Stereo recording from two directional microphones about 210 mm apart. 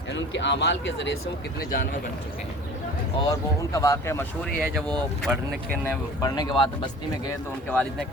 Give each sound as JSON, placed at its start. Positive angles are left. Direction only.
{"t": 0.1, "sound": "speech", "side_deg": 60}
{"t": 3.2, "sound": "speech", "side_deg": 15}
{"t": 7.7, "sound": "speech", "side_deg": 5}